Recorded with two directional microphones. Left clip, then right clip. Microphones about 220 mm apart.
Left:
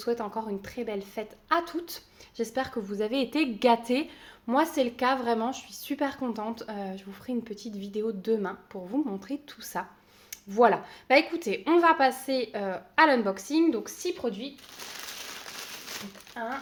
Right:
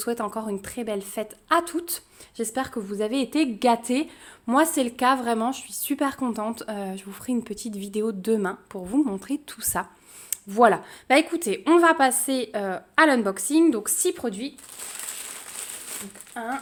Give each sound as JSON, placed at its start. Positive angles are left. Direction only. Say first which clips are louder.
{"t": 0.0, "sound": "a woman's voice", "louder": "right 2 dB", "side_deg": -40}
{"t": 16.4, "sound": "speech", "louder": "right 3 dB", "side_deg": -55}